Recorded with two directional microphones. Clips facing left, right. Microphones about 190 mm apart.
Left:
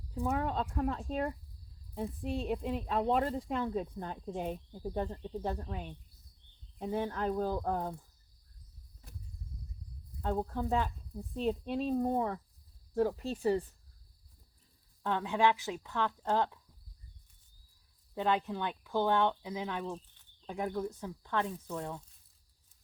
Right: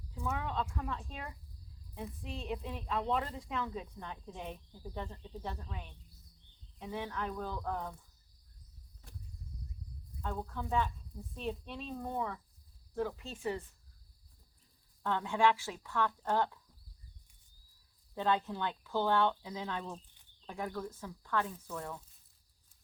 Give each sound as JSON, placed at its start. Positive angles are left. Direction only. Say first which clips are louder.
{"t": 0.1, "sound": "speech", "louder": "left 5 dB", "side_deg": 35}
{"t": 10.2, "sound": "speech", "louder": "left 6 dB", "side_deg": 35}
{"t": 15.0, "sound": "speech", "louder": "left 1 dB", "side_deg": 20}
{"t": 18.1, "sound": "speech", "louder": "left 1 dB", "side_deg": 15}